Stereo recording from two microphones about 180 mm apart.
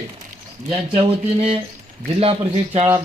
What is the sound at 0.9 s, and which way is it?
A man's voice, 35° right (ahead or behind).